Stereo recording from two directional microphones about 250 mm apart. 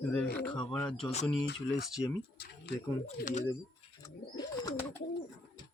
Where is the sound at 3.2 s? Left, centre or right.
Left.